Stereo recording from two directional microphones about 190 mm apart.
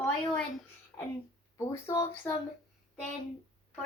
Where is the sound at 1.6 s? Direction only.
15° left (ahead or behind).